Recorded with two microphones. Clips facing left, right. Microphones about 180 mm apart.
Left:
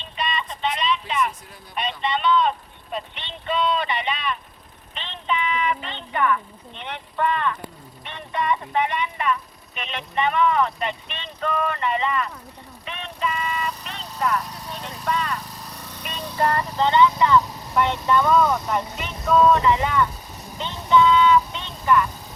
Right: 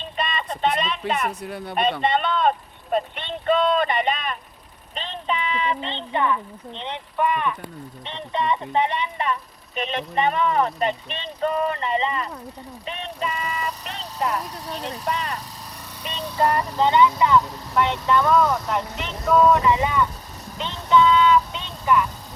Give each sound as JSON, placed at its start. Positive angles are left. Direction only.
{"t": 0.0, "sound": "a sound", "side_deg": -50}
{"t": 1.3, "sound": "speech", "side_deg": -70}
{"t": 8.0, "sound": "speech", "side_deg": -25}
{"t": 12.8, "sound": "vehicle", "side_deg": -35}
{"t": 14.8, "sound": "speech", "side_deg": -35}
{"t": 16.0, "sound": "speech", "side_deg": -20}
{"t": 17.7, "sound": "speech", "side_deg": 0}
{"t": 19.3, "sound": "speech", "side_deg": -10}
{"t": 20.7, "sound": "vehicle", "side_deg": 0}